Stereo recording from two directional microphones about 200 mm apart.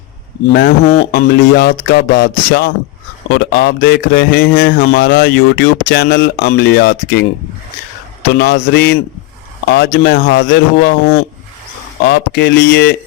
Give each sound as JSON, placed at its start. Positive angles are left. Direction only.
{"t": 1.1, "sound": "a man's voice", "side_deg": 55}
{"t": 8.3, "sound": "a man's voice", "side_deg": 55}